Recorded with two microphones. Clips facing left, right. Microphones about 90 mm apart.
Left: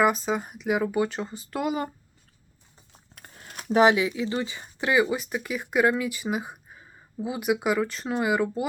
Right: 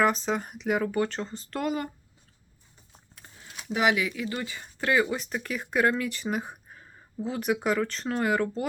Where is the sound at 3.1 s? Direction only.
60° left (ahead or behind); by 3.9 s 40° left (ahead or behind).